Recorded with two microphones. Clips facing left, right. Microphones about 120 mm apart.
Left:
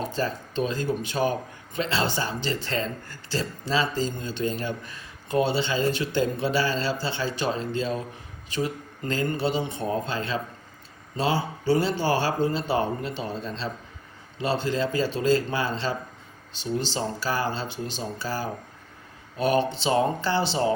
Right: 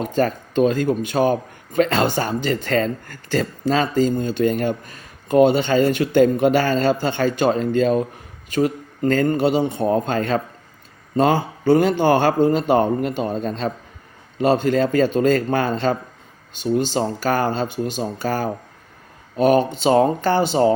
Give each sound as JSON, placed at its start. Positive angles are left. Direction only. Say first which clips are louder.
{"t": 0.0, "sound": "speech", "louder": "right 8 dB", "side_deg": -55}